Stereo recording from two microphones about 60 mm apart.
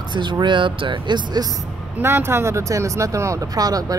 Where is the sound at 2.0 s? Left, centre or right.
Right.